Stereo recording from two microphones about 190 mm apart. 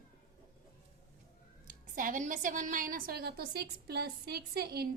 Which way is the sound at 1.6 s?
45° right (ahead or behind).